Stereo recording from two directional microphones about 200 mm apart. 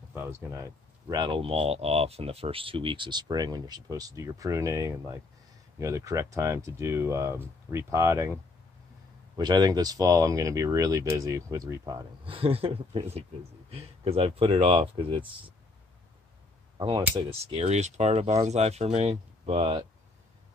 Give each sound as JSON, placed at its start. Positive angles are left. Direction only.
{"t": 0.1, "sound": "speech", "side_deg": -10}
{"t": 9.4, "sound": "speech", "side_deg": -20}
{"t": 16.7, "sound": "speech", "side_deg": -25}